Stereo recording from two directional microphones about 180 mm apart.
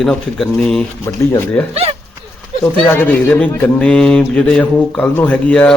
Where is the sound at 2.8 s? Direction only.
10° left (ahead or behind).